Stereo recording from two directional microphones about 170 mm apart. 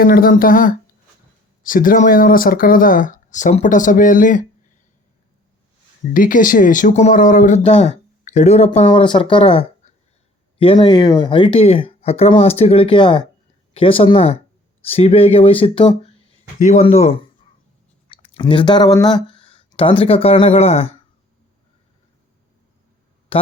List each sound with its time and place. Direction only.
0.0 s speech: 60° left (ahead or behind)
6.1 s speech: 55° left (ahead or behind); by 16.1 s 30° left (ahead or behind)
16.6 s speech: 45° left (ahead or behind)
23.3 s speech: 30° left (ahead or behind)